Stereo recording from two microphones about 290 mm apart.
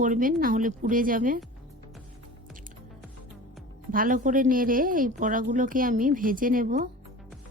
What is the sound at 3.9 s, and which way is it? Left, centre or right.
Speech, right.